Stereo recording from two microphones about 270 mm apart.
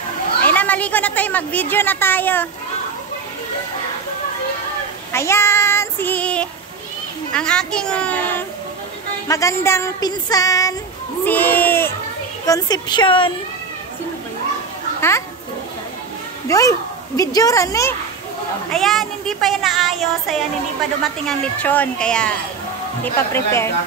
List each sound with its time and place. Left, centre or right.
0.4 s a woman's voice: centre
5.1 s child singing: centre
7.3 s a sound: centre
9.3 s music: centre
11.2 s speech: centre
12.4 s music: centre
15.0 s a child's voice: centre
16.4 s speech: centre
17.2 s music: centre
18.7 s a sound: centre
23.1 s music: centre